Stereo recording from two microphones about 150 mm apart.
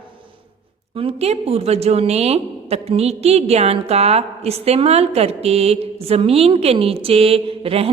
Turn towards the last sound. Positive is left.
turn(degrees=-40)  # may be behind; listen again after turning